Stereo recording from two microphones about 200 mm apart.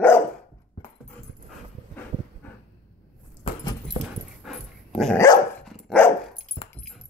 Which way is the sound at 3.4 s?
25° left (ahead or behind).